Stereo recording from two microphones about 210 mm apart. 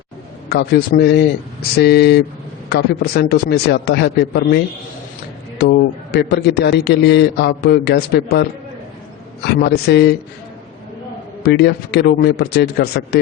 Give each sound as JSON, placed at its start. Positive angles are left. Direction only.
{"t": 0.4, "sound": "a man's voice", "side_deg": 50}
{"t": 11.4, "sound": "a man's voice", "side_deg": 50}